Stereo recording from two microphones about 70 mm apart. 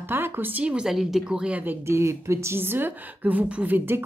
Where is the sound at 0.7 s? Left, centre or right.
Centre.